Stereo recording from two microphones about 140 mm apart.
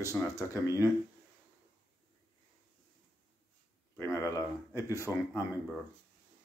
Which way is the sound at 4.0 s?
20° left (ahead or behind).